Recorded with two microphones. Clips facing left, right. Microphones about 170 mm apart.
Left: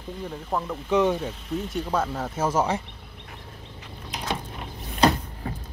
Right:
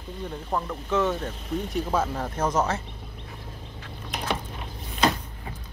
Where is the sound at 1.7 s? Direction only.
Centre (ahead or behind).